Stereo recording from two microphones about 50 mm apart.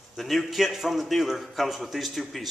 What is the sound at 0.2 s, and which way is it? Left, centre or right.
Speech, centre.